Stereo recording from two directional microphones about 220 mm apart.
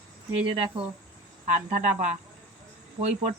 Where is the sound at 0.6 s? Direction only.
25° right (ahead or behind).